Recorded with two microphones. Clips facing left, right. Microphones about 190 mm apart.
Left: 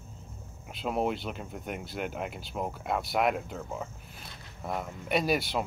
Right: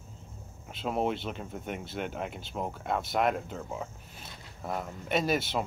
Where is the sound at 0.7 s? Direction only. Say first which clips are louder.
Even; centre (ahead or behind).